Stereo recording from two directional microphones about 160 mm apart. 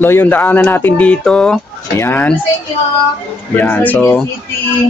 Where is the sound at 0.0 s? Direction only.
10° left (ahead or behind).